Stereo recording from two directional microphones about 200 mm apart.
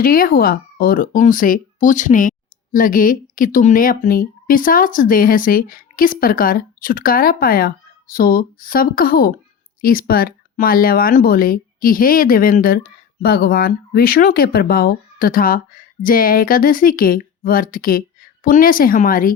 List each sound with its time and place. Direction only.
0.0 s speech: 45° left (ahead or behind)